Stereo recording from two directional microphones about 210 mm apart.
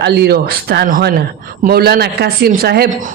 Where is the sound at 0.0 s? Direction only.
50° right (ahead or behind).